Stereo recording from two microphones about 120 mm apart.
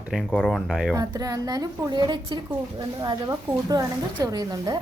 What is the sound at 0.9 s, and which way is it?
Speech, 30° right (ahead or behind).